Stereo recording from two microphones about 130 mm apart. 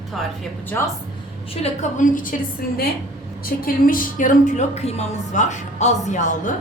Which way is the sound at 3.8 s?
90° left.